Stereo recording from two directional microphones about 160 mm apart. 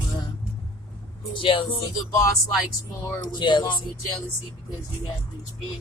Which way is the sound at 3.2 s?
30° left (ahead or behind).